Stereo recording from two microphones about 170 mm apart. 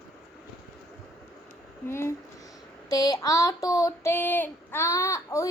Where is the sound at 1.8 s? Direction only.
15° left (ahead or behind).